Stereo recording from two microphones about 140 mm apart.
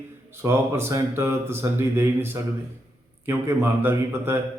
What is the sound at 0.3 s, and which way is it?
A man's voice, 20° right (ahead or behind).